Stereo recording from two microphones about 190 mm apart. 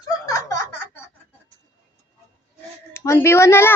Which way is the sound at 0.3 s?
15° left (ahead or behind).